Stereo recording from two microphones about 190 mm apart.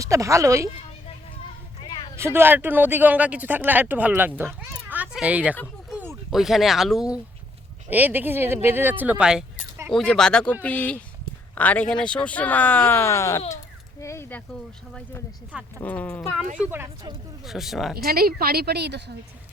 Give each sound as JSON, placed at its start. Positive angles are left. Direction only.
{"t": 0.0, "sound": "speech", "side_deg": -15}
{"t": 1.8, "sound": "a sound", "side_deg": 25}
{"t": 2.1, "sound": "speech", "side_deg": -15}
{"t": 4.9, "sound": "a sound", "side_deg": -10}
{"t": 5.9, "sound": "speech", "side_deg": -5}
{"t": 9.9, "sound": "speech", "side_deg": 5}
{"t": 15.8, "sound": "speech", "side_deg": 10}
{"t": 16.6, "sound": "speech", "side_deg": -10}
{"t": 17.4, "sound": "speech", "side_deg": 0}
{"t": 17.9, "sound": "speech", "side_deg": -55}